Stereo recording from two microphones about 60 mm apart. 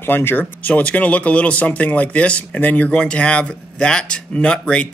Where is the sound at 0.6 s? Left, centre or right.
Left.